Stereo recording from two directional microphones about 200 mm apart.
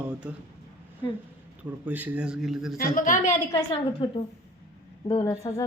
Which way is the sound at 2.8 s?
40° left (ahead or behind).